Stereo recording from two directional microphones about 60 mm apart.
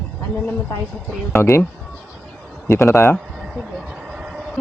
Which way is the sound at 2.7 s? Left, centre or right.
Left.